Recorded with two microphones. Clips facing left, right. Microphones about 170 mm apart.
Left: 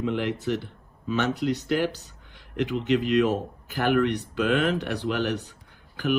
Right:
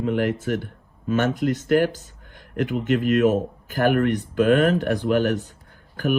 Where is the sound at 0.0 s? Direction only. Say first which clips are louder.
Right 4 dB; 45° right (ahead or behind).